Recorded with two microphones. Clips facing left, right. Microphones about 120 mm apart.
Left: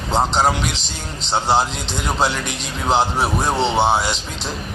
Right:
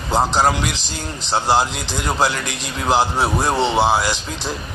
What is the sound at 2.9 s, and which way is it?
A man's voice, centre (ahead or behind).